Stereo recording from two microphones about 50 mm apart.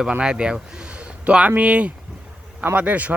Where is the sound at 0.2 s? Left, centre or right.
Centre.